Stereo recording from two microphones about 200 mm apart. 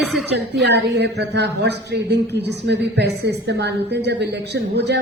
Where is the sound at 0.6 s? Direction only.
60° right (ahead or behind).